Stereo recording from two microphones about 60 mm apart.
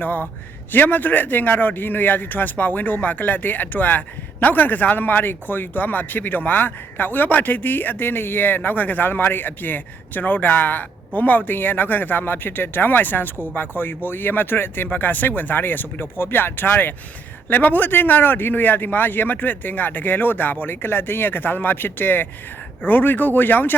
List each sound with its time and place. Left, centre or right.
0.0 s a man's voice: left